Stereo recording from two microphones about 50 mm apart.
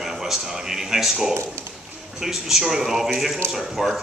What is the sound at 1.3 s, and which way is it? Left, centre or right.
Speech, right.